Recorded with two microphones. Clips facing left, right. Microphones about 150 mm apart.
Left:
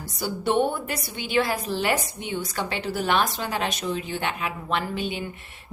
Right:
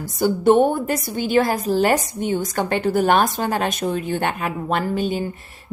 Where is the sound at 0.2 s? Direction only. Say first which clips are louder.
Right 8 dB; 45° right (ahead or behind).